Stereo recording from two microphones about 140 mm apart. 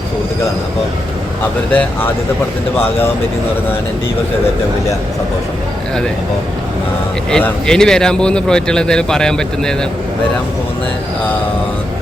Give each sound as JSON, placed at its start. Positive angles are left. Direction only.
{"t": 1.7, "sound": "speech", "side_deg": 10}
{"t": 7.3, "sound": "a man's voice", "side_deg": 5}